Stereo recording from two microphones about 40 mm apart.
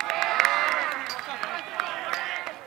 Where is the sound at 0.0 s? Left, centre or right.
Centre.